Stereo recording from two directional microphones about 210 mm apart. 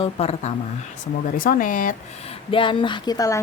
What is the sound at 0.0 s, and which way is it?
Speech, 30° left (ahead or behind).